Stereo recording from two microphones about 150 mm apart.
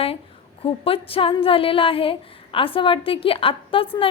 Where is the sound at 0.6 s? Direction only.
40° left (ahead or behind).